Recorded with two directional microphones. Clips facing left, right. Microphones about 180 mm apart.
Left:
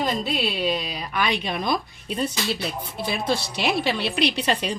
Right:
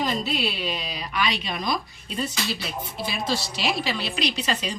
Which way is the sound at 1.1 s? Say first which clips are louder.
Left 2 dB; 50° left (ahead or behind).